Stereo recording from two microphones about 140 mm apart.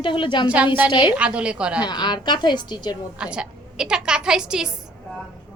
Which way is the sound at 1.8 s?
30° left (ahead or behind).